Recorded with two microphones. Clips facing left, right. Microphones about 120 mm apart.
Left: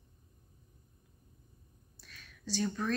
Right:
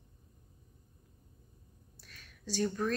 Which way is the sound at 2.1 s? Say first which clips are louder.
Even; 50° right (ahead or behind).